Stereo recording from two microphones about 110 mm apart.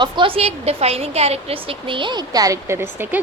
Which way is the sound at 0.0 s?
50° right (ahead or behind).